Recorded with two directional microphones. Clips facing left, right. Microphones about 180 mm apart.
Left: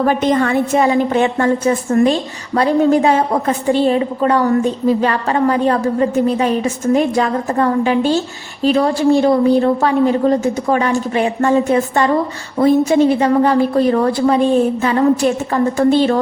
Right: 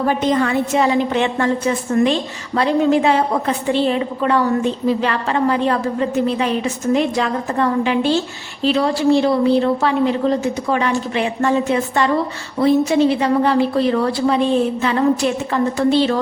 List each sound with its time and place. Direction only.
0.0 s a woman's voice: 50° left (ahead or behind)